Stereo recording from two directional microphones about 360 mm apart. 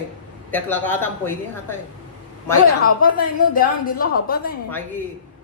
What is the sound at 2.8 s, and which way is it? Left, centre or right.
A woman's voice, left.